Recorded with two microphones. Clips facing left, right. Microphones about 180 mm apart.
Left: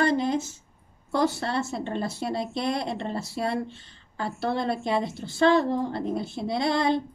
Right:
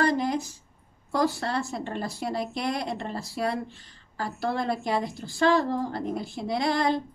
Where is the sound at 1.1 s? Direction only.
25° left (ahead or behind).